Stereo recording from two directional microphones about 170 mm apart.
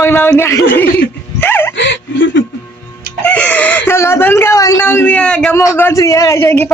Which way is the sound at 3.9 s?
15° left (ahead or behind).